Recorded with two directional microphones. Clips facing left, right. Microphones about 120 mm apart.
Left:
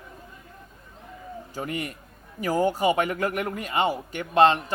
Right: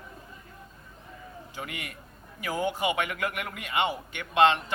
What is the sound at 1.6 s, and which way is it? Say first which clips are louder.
A man's voice: left 8 dB; 35° left (ahead or behind).